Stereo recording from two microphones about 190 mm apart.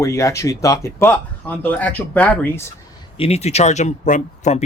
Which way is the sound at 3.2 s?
35° left (ahead or behind).